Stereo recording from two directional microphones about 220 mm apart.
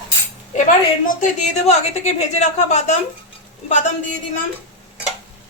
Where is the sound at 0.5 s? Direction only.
35° left (ahead or behind).